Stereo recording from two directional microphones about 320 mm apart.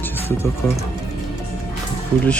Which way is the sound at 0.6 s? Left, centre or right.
Centre.